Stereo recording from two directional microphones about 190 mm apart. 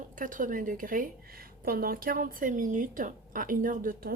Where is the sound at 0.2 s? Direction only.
45° right (ahead or behind).